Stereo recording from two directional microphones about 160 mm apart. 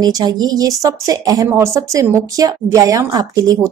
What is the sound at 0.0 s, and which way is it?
A woman's voice, 25° right (ahead or behind).